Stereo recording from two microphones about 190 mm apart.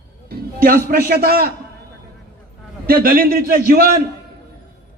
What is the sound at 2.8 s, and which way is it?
A man's voice, 50° right (ahead or behind).